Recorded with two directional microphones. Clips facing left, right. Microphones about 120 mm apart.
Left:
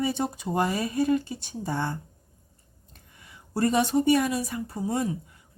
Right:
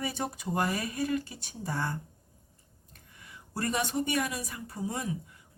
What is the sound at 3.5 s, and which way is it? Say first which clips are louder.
Speech: left 8 dB; 30° left (ahead or behind).